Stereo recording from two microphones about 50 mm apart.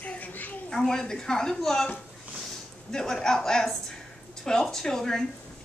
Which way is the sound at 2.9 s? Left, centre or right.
Centre.